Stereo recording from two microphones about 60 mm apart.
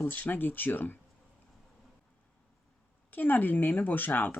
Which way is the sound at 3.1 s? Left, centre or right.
Left.